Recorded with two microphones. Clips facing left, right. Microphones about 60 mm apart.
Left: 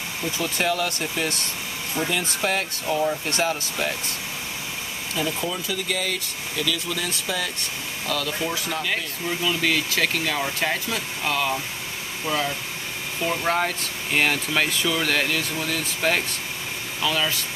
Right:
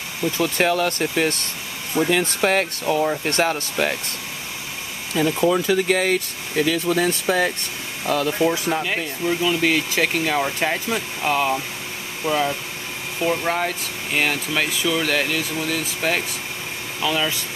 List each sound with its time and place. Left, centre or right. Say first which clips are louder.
0.4 s speech: right 5 dB; right
5.1 s speech: right 9 dB; right
8.8 s speech: right 4 dB; centre
13.4 s speech: even; centre